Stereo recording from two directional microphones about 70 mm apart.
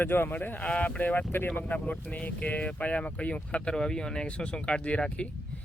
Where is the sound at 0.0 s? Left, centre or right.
Left.